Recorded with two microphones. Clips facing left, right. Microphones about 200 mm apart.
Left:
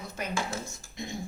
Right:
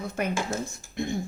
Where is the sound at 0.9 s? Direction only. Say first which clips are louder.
Right 9 dB; 55° right (ahead or behind).